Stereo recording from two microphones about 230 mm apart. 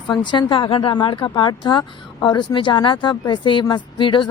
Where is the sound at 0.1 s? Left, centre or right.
Centre.